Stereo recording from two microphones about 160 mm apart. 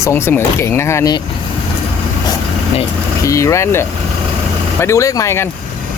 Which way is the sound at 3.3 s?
20° left (ahead or behind).